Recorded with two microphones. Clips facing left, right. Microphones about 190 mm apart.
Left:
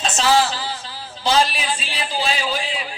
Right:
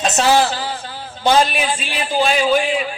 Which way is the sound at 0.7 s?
55° right (ahead or behind).